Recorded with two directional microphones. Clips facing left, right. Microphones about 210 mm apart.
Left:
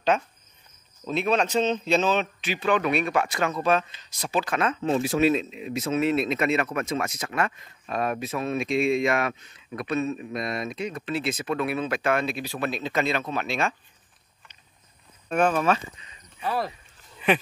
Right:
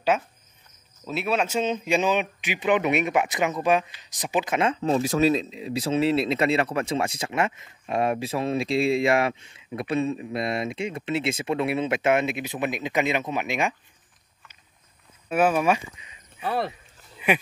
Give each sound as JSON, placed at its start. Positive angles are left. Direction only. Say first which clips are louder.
{"t": 0.1, "sound": "a man's voice", "louder": "left 1 dB", "side_deg": -5}
{"t": 4.8, "sound": "speech", "louder": "even", "side_deg": -35}
{"t": 15.2, "sound": "speech", "louder": "right 1 dB", "side_deg": -5}
{"t": 16.4, "sound": "speech", "louder": "right 1 dB", "side_deg": -25}
{"t": 17.2, "sound": "speech", "louder": "left 1 dB", "side_deg": -10}